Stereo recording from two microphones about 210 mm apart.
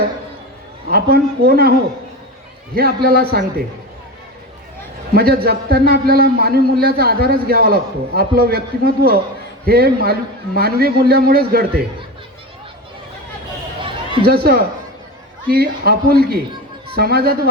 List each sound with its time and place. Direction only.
0.9 s a man's voice: 45° right (ahead or behind)
2.7 s a man's voice: 45° right (ahead or behind)
5.1 s a man's voice: 45° right (ahead or behind)
14.3 s a man's voice: 50° right (ahead or behind)